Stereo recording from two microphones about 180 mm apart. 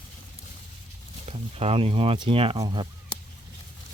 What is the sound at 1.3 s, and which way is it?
Speech, 35° right (ahead or behind).